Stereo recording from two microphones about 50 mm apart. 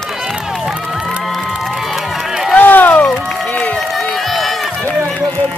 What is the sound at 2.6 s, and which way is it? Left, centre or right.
Run, left.